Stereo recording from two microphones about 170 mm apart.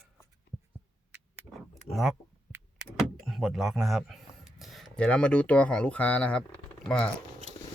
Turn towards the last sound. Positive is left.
turn(degrees=5)  # may be behind; listen again after turning